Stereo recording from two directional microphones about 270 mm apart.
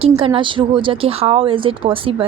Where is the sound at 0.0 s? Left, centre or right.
Centre.